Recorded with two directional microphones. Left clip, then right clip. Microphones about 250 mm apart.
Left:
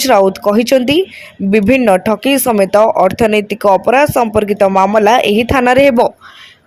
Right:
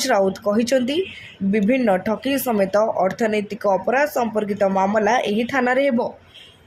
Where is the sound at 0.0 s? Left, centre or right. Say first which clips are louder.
Left 9 dB; left.